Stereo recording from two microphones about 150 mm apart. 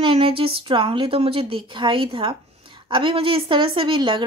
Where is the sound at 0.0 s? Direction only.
35° right (ahead or behind).